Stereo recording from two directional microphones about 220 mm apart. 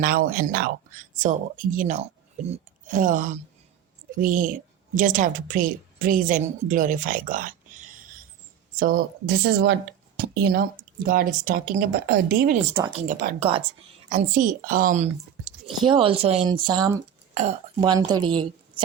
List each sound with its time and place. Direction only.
0.0 s speech: 40° right (ahead or behind)
13.4 s speech: 25° right (ahead or behind)
14.1 s speech: 35° right (ahead or behind)
15.8 s a woman's voice: 25° right (ahead or behind)